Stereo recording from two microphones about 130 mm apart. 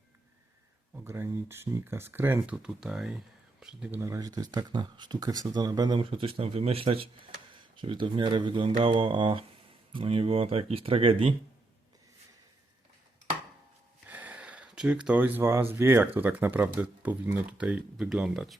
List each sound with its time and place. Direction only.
1.0 s speech: 20° right (ahead or behind)
4.0 s speech: 25° right (ahead or behind)
6.1 s speech: 45° right (ahead or behind)
14.1 s a sound: 10° right (ahead or behind)
15.7 s speech: 20° right (ahead or behind); by 18.5 s 5° right (ahead or behind)